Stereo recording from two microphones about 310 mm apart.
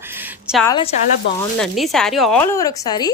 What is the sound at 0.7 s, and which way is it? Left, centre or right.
Speech, centre.